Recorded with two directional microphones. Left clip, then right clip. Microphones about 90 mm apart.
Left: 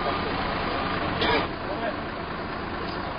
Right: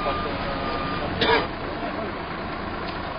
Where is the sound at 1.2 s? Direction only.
25° right (ahead or behind).